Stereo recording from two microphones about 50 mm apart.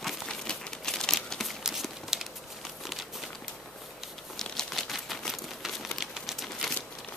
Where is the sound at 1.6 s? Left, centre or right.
Centre.